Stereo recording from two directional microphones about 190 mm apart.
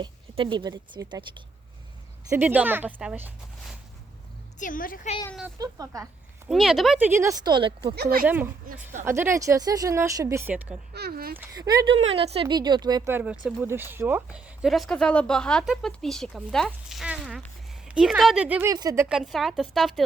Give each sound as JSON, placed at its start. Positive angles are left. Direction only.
{"t": 0.0, "sound": "speech", "side_deg": -25}
{"t": 2.3, "sound": "speech", "side_deg": -10}
{"t": 4.6, "sound": "a woman's voice", "side_deg": 45}
{"t": 5.5, "sound": "speech", "side_deg": -20}
{"t": 6.5, "sound": "speech", "side_deg": 0}
{"t": 7.9, "sound": "speech", "side_deg": -55}
{"t": 8.3, "sound": "speech", "side_deg": -10}
{"t": 10.9, "sound": "speech", "side_deg": -55}
{"t": 11.3, "sound": "speech", "side_deg": -20}
{"t": 12.0, "sound": "speech", "side_deg": -30}
{"t": 13.1, "sound": "speech", "side_deg": -10}
{"t": 18.7, "sound": "speech", "side_deg": -20}
{"t": 19.0, "sound": "speech", "side_deg": -5}